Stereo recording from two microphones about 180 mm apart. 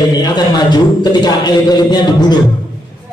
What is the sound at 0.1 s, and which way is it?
A man's voice, 25° left (ahead or behind).